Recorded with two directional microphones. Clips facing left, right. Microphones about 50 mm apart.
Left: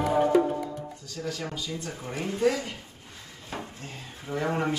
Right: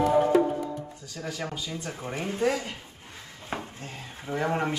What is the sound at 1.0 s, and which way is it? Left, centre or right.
Speech, centre.